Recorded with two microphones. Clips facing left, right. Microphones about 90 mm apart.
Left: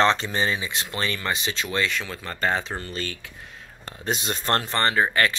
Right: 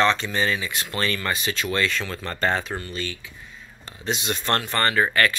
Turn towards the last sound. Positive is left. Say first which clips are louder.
# right 1 dB
turn(degrees=20)  # may be behind; listen again after turning